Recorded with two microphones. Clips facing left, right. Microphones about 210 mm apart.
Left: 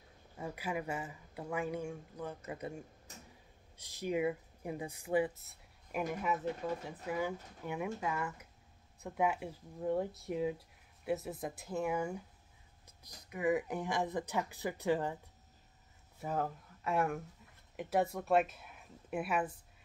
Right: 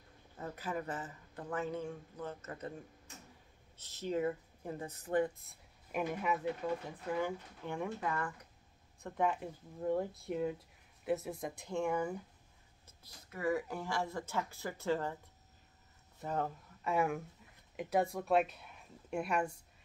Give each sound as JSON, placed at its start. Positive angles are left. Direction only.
{"t": 0.4, "sound": "speech", "side_deg": 10}
{"t": 16.2, "sound": "speech", "side_deg": 5}